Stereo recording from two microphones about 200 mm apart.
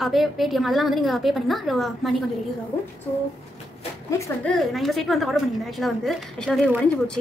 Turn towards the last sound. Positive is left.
turn(degrees=0)  # may be behind; listen again after turning